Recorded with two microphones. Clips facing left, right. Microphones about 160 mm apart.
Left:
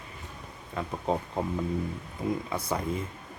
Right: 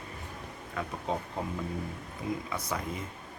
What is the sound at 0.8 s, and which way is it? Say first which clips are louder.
Speech: left 2 dB; 30° left (ahead or behind).